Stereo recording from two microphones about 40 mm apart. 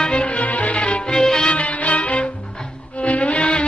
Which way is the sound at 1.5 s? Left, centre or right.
Left.